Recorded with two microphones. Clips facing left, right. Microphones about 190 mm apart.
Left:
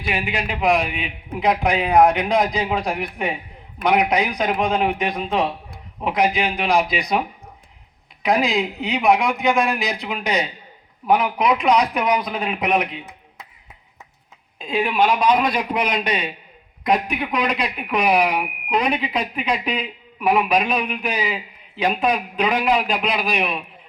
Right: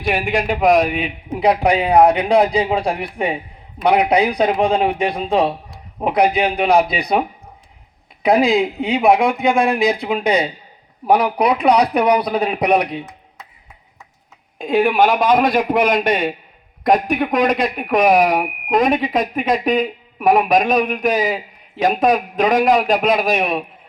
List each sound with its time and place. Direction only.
0.0 s a man's voice: 50° right (ahead or behind)
14.6 s speech: 50° right (ahead or behind)